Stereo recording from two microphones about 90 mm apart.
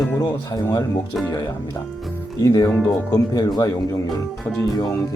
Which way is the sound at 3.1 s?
45° left (ahead or behind).